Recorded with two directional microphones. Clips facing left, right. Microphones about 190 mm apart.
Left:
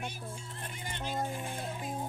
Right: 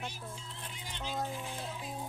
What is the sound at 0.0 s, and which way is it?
Music, 50° left (ahead or behind).